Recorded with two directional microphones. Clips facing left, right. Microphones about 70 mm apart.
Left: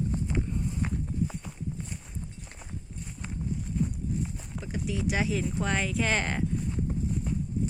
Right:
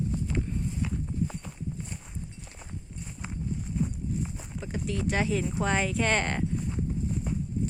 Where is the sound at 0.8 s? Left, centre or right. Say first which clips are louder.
Left 1 dB; left.